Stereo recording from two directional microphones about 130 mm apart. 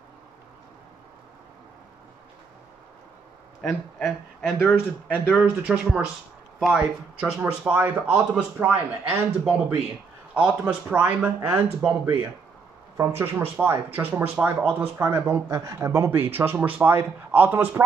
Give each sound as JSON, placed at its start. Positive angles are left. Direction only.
{"t": 4.0, "sound": "speech", "side_deg": 0}
{"t": 5.0, "sound": "speech", "side_deg": 10}
{"t": 5.4, "sound": "speech", "side_deg": -5}